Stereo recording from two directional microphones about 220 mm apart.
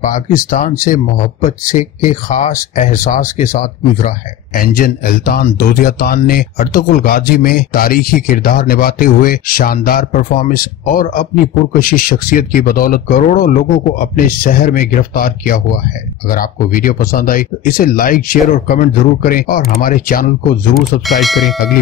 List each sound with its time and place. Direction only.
0.0 s speech: 35° left (ahead or behind)
20.7 s speech: centre (ahead or behind)